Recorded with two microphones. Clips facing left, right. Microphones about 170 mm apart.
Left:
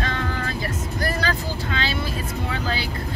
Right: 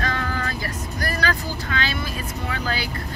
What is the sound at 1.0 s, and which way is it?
Speech, 25° left (ahead or behind).